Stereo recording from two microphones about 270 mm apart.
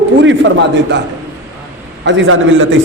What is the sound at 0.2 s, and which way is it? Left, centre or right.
Speech, right.